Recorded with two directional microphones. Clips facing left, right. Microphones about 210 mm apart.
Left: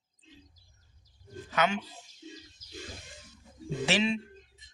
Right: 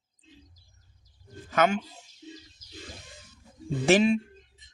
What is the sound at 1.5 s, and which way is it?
Speech, 50° right (ahead or behind).